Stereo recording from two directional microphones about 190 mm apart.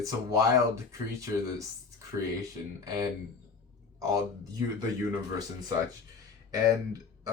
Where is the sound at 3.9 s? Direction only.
15° right (ahead or behind).